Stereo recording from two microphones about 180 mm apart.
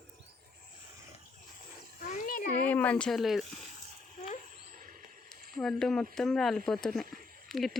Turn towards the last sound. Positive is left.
turn(degrees=0)  # may be behind; listen again after turning